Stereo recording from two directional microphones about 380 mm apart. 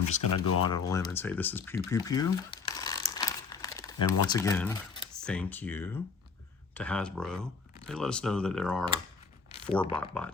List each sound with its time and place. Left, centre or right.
0.3 s speech: left
0.7 s speech: centre
9.9 s speech: centre